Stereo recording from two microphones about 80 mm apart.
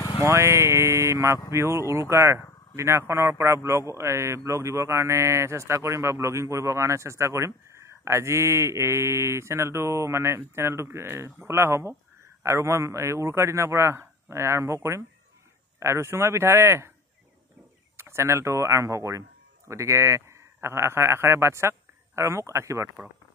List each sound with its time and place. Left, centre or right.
0.2 s speech: right
17.9 s a man's voice: right